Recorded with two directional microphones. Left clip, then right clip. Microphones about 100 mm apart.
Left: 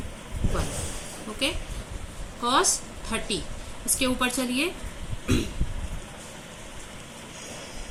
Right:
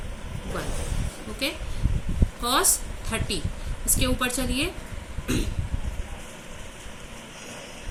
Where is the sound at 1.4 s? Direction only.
25° left (ahead or behind).